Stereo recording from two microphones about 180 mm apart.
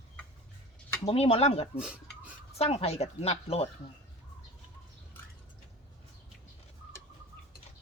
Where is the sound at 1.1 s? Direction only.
35° left (ahead or behind).